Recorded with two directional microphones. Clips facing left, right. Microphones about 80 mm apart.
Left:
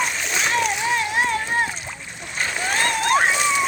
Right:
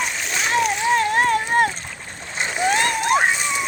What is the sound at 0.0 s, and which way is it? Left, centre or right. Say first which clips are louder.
Splash: left 1 dB; centre.